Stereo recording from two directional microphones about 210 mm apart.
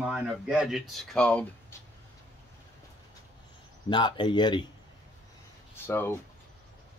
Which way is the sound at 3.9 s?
20° left (ahead or behind).